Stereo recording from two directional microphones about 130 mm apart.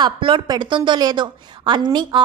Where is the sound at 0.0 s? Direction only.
40° right (ahead or behind).